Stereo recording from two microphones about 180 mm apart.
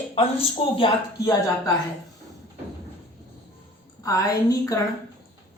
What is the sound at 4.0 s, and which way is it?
Speech, 20° left (ahead or behind).